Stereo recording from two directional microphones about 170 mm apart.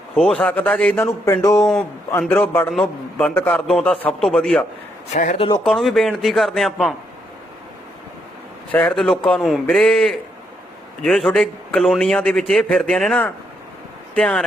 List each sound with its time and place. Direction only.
0.2 s a man's voice: 5° left (ahead or behind)
5.1 s speech: 45° left (ahead or behind)
5.5 s a man's voice: centre (ahead or behind)
8.7 s a man's voice: 5° left (ahead or behind)